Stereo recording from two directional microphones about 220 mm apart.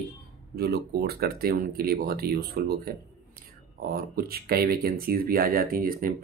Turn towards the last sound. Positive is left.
turn(degrees=-40)  # may be behind; listen again after turning